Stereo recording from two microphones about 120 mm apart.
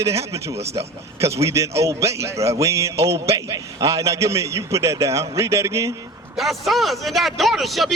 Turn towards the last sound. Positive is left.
turn(degrees=0)  # may be behind; listen again after turning